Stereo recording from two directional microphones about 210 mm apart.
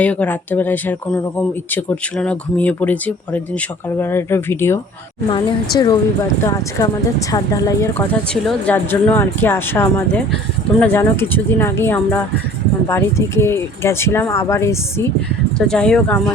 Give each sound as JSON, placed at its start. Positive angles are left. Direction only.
{"t": 0.0, "sound": "a woman's voice", "side_deg": 5}